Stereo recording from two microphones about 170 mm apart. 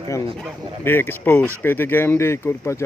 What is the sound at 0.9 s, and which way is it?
Speech, 10° left (ahead or behind).